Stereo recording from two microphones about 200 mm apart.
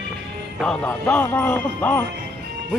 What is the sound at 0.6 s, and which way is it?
Speech, 5° left (ahead or behind).